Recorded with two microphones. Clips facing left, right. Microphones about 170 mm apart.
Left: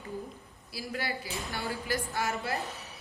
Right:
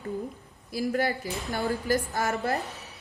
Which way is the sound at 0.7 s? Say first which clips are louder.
Right 9 dB; 50° right (ahead or behind).